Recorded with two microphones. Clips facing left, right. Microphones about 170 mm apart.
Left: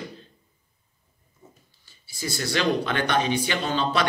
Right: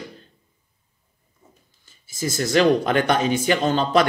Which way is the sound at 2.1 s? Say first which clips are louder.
Right 7 dB; 45° right (ahead or behind).